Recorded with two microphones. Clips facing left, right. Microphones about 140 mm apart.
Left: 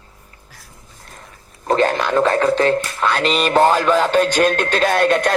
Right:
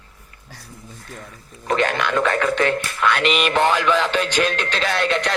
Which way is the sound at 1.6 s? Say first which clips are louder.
Left 4 dB; 35° left (ahead or behind).